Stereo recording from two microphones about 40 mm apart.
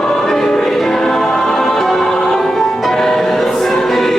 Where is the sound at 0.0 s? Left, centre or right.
Centre.